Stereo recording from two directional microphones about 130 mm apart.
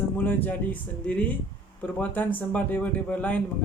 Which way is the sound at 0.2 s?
15° left (ahead or behind).